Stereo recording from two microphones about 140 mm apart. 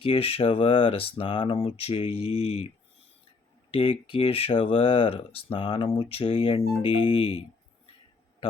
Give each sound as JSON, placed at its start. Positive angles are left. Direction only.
{"t": 0.0, "sound": "speech", "side_deg": 45}
{"t": 3.7, "sound": "speech", "side_deg": 40}